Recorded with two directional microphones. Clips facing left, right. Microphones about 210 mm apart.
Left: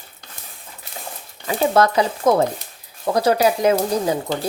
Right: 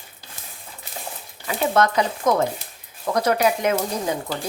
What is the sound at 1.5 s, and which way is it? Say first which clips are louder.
Speech: left 3 dB; 35° left (ahead or behind).